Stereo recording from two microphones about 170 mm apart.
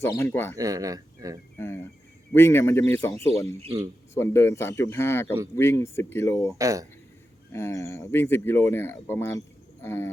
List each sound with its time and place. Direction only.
0.0 s speech: 15° left (ahead or behind)
0.5 s speech: 20° right (ahead or behind)
1.5 s speech: 15° left (ahead or behind)
6.6 s speech: 20° right (ahead or behind)
7.5 s speech: 15° left (ahead or behind)